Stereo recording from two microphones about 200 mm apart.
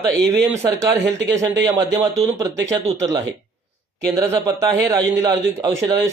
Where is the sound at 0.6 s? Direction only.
15° right (ahead or behind).